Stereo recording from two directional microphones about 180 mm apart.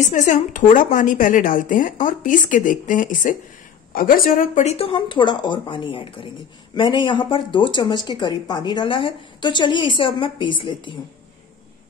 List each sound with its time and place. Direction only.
0.0 s a woman's voice: 45° left (ahead or behind); by 11.0 s 25° left (ahead or behind)